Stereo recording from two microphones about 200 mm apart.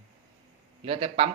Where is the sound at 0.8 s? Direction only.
30° right (ahead or behind).